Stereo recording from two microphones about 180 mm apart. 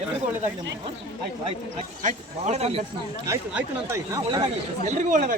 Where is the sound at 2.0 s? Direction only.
35° right (ahead or behind).